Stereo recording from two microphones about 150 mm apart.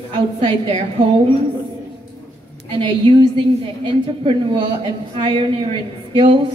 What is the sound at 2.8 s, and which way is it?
A woman's voice, 30° right (ahead or behind).